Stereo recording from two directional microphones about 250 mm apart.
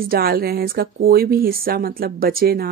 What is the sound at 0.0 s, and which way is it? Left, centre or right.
Speech, right.